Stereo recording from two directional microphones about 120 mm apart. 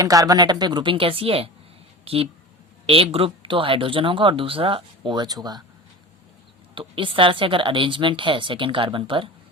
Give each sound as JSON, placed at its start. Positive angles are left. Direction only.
{"t": 0.0, "sound": "a woman's voice", "side_deg": -30}
{"t": 6.7, "sound": "speech", "side_deg": -45}